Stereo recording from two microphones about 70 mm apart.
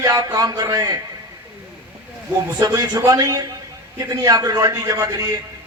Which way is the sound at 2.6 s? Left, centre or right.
Right.